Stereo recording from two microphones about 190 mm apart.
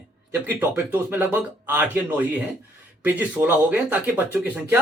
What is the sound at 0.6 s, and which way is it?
Speech, 10° right (ahead or behind).